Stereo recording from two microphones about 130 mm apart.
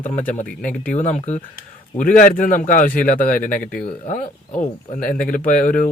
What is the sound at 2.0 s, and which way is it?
A man's voice, 90° left.